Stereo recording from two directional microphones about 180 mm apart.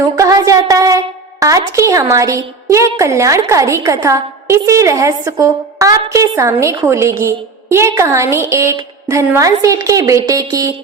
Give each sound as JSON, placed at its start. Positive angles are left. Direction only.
{"t": 0.2, "sound": "a woman's voice", "side_deg": -20}